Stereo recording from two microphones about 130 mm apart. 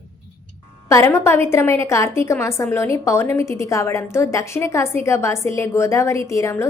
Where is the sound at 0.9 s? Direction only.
20° left (ahead or behind).